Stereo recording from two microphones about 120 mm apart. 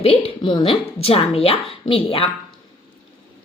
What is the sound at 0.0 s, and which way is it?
A woman's voice, 55° left (ahead or behind).